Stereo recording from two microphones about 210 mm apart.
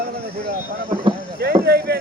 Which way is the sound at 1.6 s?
50° right (ahead or behind).